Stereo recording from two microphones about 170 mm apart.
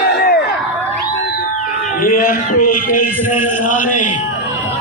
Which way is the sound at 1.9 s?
55° left (ahead or behind).